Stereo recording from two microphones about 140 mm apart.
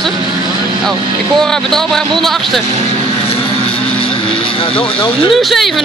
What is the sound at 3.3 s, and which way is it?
Vehicle, 40° left (ahead or behind).